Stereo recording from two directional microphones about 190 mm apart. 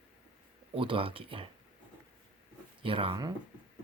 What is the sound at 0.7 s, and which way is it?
Speech, 30° right (ahead or behind).